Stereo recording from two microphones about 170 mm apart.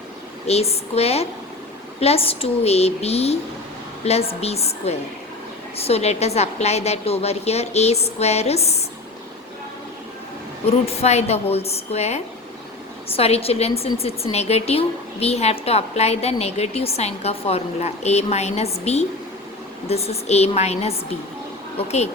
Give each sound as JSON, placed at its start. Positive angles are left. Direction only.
{"t": 0.4, "sound": "a woman's voice", "side_deg": 40}
{"t": 10.7, "sound": "a woman's voice", "side_deg": 35}